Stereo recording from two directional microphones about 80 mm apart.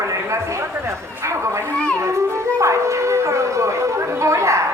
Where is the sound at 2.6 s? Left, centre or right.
Right.